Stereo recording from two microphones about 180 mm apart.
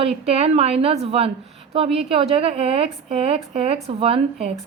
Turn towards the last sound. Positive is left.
turn(degrees=-35)  # may be behind; listen again after turning